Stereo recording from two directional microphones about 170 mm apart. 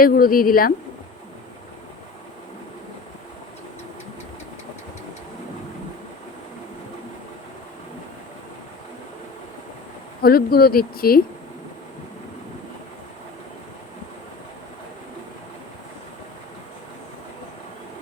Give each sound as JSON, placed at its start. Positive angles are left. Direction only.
{"t": 0.0, "sound": "speech", "side_deg": 60}
{"t": 10.2, "sound": "speech", "side_deg": 60}